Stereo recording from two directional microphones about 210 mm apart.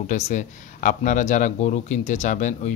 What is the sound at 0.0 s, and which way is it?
Speech, 35° left (ahead or behind).